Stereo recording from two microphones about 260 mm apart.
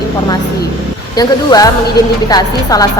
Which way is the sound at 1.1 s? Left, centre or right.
Centre.